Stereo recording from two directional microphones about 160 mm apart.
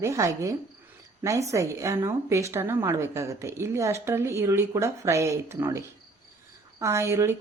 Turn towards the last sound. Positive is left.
turn(degrees=-15)  # may be behind; listen again after turning